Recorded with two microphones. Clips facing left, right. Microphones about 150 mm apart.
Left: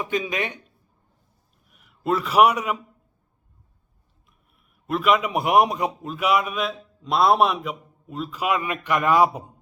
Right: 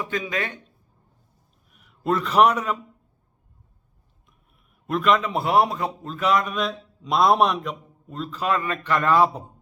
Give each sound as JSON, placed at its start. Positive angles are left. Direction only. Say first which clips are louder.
{"t": 0.0, "sound": "a man's voice", "louder": "left 2 dB", "side_deg": 20}
{"t": 1.7, "sound": "a man's voice", "louder": "even", "side_deg": 0}
{"t": 4.3, "sound": "a man's voice", "louder": "right 2 dB", "side_deg": 0}